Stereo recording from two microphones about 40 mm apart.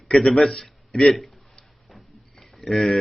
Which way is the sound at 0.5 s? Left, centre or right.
Centre.